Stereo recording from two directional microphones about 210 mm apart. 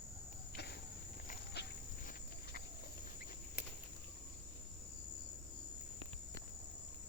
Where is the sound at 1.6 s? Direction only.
50° left (ahead or behind).